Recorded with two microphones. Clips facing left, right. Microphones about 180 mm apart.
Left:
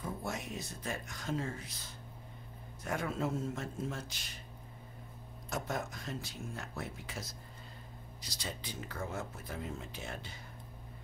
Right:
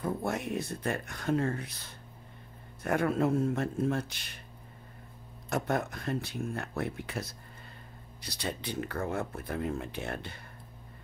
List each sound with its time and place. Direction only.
0.0 s speech: 60° right (ahead or behind)
5.5 s speech: 60° right (ahead or behind)